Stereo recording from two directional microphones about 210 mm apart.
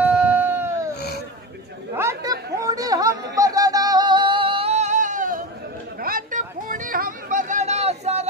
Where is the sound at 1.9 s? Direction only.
15° right (ahead or behind).